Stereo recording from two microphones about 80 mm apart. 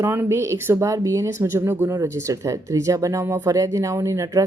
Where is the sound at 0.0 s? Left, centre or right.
Right.